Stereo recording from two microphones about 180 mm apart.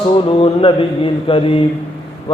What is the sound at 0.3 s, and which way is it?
Mantra, 30° left (ahead or behind).